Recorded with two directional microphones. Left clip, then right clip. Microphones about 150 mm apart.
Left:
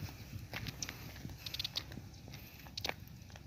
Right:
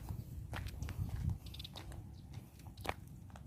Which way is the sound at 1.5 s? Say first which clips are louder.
Left 16 dB; 90° right.